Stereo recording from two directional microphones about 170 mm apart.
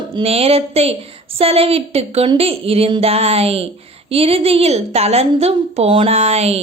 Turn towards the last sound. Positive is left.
turn(degrees=-40)  # may be behind; listen again after turning